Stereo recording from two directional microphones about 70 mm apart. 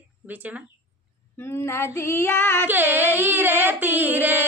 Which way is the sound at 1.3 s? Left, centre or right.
Left.